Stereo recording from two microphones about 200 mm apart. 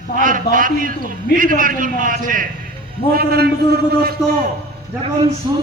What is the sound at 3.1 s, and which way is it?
Speech, 50° right (ahead or behind).